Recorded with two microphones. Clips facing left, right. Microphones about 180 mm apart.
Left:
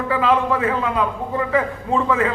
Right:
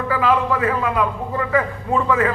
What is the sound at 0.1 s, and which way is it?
A man's voice, 25° left (ahead or behind).